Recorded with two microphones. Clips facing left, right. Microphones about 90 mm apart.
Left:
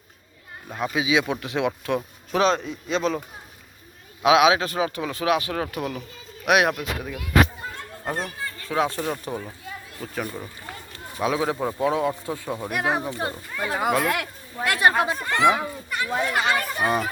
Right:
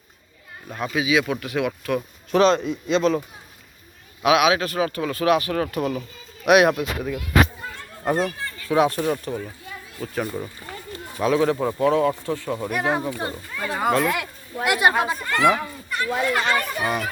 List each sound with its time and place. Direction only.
0.7 s speech: 20° left (ahead or behind)
2.0 s speech: 5° left (ahead or behind)
4.2 s speech: 25° left (ahead or behind)
6.4 s speech: centre (ahead or behind)
8.7 s speech: 5° right (ahead or behind)
11.2 s speech: 10° left (ahead or behind)
13.1 s speech: centre (ahead or behind)
14.6 s speech: 10° right (ahead or behind)
15.2 s speech: 20° left (ahead or behind)
15.5 s a sound: 15° left (ahead or behind)
16.1 s speech: 5° left (ahead or behind)